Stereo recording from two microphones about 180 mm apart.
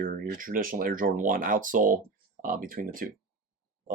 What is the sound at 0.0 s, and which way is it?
Speech, 50° right (ahead or behind).